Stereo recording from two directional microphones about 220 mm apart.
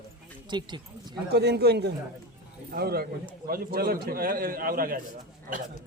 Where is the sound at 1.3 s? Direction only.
50° right (ahead or behind).